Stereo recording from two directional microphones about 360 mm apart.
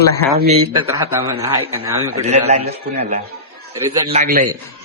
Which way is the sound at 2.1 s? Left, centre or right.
Centre.